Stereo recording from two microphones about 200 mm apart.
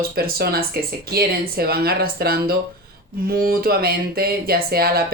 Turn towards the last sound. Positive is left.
turn(degrees=-50)  # may be behind; listen again after turning